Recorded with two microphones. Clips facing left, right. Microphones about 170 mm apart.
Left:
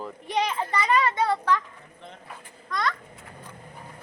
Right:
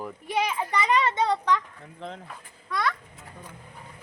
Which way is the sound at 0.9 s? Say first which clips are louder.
Left 1 dB; 25° right (ahead or behind).